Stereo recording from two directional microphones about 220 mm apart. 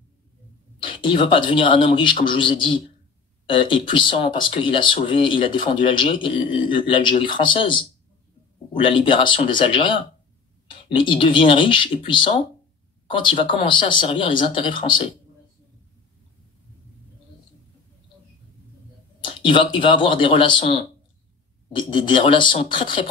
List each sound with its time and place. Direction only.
0.7 s speech: 20° left (ahead or behind)
19.2 s speech: 20° left (ahead or behind)